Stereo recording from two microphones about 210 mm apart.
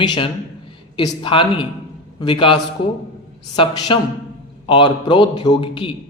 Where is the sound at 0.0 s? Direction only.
20° left (ahead or behind).